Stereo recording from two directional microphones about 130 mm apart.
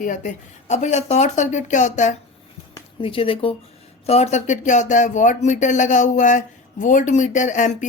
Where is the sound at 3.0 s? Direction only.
45° left (ahead or behind).